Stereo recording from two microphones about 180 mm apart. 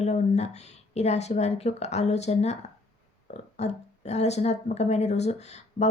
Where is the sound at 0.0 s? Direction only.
40° left (ahead or behind).